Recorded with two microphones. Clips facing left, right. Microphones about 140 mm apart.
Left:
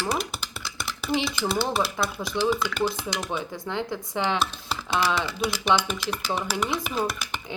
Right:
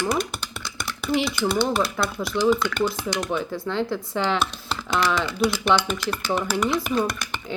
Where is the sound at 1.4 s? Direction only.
5° left (ahead or behind).